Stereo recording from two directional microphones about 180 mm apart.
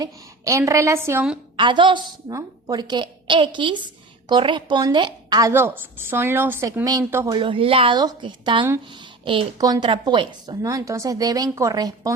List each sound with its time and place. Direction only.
0.0 s a woman's voice: 20° right (ahead or behind)
1.5 s a woman's voice: 25° right (ahead or behind)
7.3 s speech: 30° right (ahead or behind)